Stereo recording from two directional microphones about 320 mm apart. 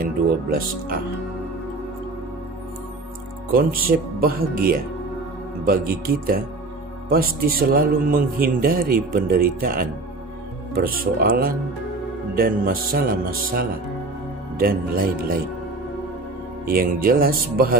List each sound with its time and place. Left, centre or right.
0.0 s speech: right
3.5 s a man's voice: right
16.6 s a man's voice: right